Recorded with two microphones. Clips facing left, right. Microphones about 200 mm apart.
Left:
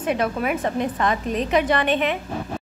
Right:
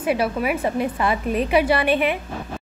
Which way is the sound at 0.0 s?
5° right (ahead or behind).